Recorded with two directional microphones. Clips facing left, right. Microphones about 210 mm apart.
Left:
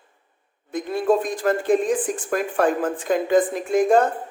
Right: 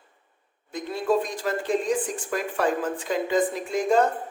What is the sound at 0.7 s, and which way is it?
A man's voice, 50° left (ahead or behind).